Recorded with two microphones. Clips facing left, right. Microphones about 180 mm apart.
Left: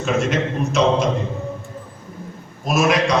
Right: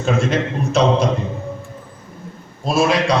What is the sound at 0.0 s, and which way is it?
Speech, 35° right (ahead or behind).